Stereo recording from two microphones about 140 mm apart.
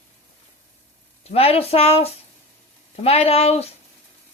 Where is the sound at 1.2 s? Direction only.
45° left (ahead or behind).